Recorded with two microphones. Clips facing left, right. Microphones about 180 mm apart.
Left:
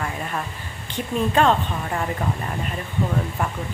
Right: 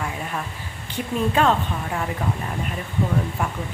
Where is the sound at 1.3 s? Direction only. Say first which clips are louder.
Left 2 dB; 5° right (ahead or behind).